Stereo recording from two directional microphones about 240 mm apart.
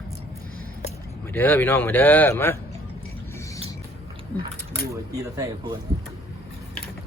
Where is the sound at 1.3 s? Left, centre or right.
Centre.